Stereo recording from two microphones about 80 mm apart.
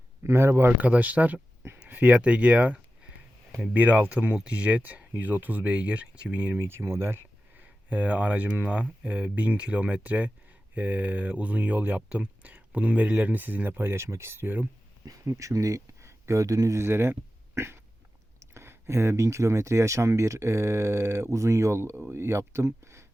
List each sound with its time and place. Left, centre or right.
0.2 s speech: right
0.8 s speech: centre
6.6 s speech: right
7.6 s speech: centre
15.2 s speech: right